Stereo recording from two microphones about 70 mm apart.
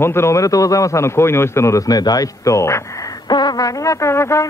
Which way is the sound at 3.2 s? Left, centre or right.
Left.